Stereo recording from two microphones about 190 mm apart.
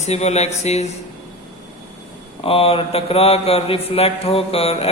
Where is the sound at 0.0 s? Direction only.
35° left (ahead or behind).